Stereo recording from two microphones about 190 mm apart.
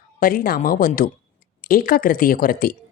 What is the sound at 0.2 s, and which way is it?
Speech, 50° left (ahead or behind).